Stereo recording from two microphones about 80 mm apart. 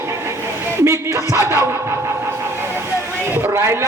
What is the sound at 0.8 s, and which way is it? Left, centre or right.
Speech, right.